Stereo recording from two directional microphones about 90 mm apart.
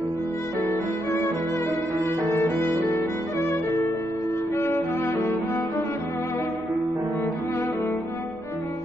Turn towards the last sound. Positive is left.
turn(degrees=25)  # may be behind; listen again after turning